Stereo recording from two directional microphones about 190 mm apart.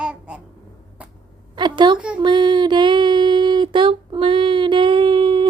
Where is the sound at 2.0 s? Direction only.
5° right (ahead or behind).